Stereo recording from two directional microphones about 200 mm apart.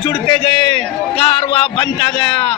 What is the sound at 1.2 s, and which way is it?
A man's voice, 25° left (ahead or behind).